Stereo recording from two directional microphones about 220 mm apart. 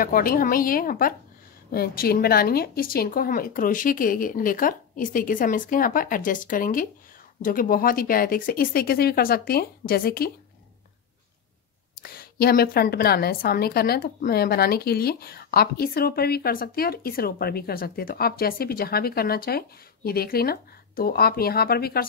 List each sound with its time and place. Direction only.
0.0 s a woman's voice: 40° left (ahead or behind)
12.0 s a woman's voice: 45° left (ahead or behind)